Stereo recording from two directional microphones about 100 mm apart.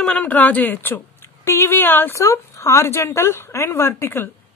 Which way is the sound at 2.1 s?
30° left (ahead or behind).